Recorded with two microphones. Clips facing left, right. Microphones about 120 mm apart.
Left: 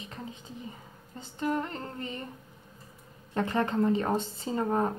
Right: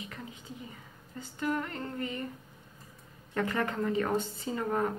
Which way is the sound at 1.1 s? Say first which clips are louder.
Left 2 dB; 30° left (ahead or behind).